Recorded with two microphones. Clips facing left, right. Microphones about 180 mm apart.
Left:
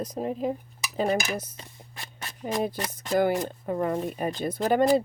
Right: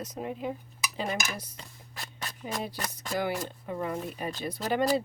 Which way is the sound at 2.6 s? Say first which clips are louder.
Left 7 dB; 50° left (ahead or behind).